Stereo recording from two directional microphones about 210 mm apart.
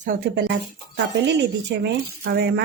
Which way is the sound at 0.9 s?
55° right (ahead or behind).